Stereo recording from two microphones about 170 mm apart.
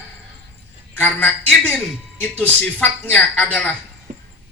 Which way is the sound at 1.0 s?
10° left (ahead or behind).